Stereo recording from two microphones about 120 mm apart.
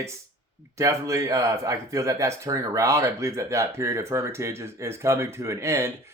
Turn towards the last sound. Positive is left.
turn(degrees=-20)  # may be behind; listen again after turning